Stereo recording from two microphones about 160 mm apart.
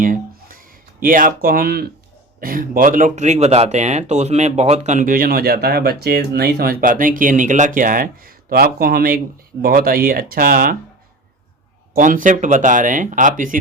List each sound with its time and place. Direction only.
0.0 s a sound: 60° right (ahead or behind)
2.4 s speech: 60° right (ahead or behind)
11.9 s speech: 55° right (ahead or behind)